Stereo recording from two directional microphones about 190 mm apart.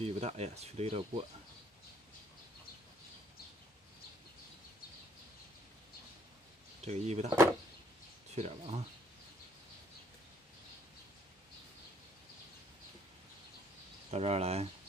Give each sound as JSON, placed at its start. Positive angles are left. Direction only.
{"t": 0.0, "sound": "speech", "side_deg": -35}
{"t": 6.8, "sound": "speech", "side_deg": -35}
{"t": 8.4, "sound": "speech", "side_deg": -35}
{"t": 14.1, "sound": "speech", "side_deg": -35}